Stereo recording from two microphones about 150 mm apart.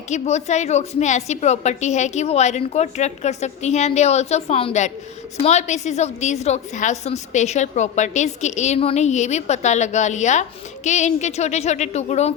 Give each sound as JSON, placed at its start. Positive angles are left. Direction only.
{"t": 0.1, "sound": "a woman's voice", "side_deg": 50}